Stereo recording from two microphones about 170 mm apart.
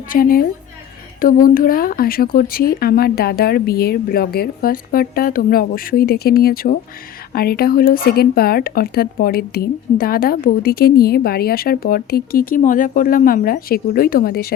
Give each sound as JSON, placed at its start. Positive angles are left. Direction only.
{"t": 0.1, "sound": "speech", "side_deg": 55}